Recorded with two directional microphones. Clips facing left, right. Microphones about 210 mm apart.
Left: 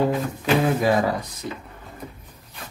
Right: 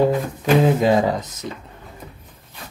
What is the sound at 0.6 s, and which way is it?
Speech, 20° right (ahead or behind).